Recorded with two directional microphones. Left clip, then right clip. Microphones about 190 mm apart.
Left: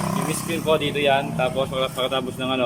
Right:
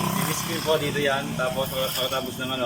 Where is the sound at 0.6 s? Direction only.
Centre (ahead or behind).